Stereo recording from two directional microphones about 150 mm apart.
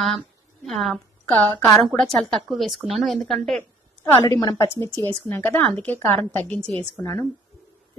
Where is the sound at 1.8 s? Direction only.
Centre (ahead or behind).